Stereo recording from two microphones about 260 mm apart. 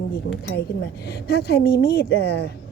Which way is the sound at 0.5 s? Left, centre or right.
Left.